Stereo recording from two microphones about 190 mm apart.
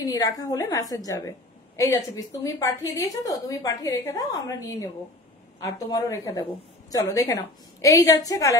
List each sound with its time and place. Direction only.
0.0 s a woman's voice: 20° left (ahead or behind)